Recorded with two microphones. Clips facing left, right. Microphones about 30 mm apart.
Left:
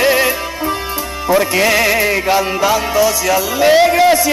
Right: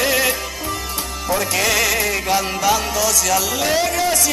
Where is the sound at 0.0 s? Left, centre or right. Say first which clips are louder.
Left 5 dB; left.